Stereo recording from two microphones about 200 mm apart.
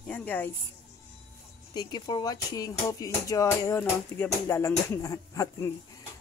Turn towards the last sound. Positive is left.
turn(degrees=15)  # may be behind; listen again after turning